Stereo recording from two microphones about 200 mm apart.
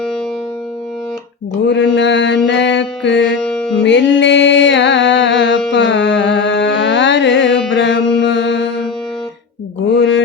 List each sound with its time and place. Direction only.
1.6 s mantra: 65° left (ahead or behind)
2.5 s music: 65° left (ahead or behind)
3.4 s music: 5° left (ahead or behind)
3.8 s music: 65° left (ahead or behind)
9.9 s mantra: 70° left (ahead or behind)